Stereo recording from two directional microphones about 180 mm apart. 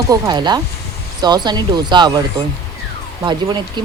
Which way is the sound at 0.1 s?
25° right (ahead or behind).